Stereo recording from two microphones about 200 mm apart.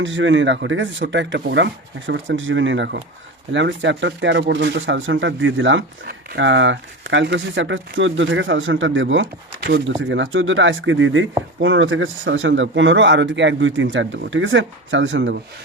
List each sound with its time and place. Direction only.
0.0 s speech: 70° right (ahead or behind)
9.2 s speech: 55° right (ahead or behind)